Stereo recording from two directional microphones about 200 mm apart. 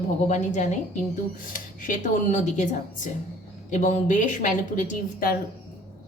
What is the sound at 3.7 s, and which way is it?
A woman's voice, 35° left (ahead or behind).